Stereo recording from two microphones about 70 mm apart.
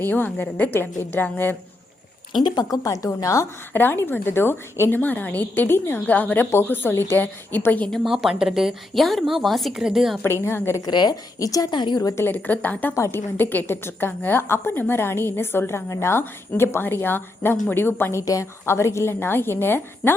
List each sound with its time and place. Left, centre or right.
0.0 s a woman's voice: left
2.4 s speech: left
3.7 s a woman's voice: left
6.1 s a woman's voice: left
8.0 s a woman's voice: centre
10.2 s speech: left
10.8 s a woman's voice: left
11.3 s speech: left
12.1 s a woman's voice: left
12.9 s a woman's voice: left